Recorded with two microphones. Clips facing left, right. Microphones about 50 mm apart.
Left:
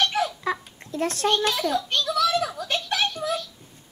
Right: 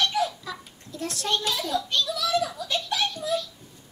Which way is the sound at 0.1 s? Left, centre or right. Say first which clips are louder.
Left 2 dB; left.